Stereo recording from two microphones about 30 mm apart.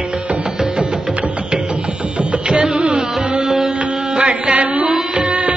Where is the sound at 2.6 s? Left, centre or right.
Right.